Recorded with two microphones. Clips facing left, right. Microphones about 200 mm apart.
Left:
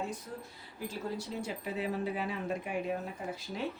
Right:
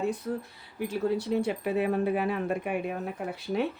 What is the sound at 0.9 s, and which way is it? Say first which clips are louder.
Speech: right 10 dB; 65° right (ahead or behind).